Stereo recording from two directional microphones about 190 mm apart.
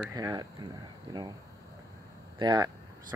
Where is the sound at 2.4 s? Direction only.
20° right (ahead or behind).